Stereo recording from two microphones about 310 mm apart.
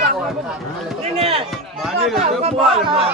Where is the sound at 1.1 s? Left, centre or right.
Centre.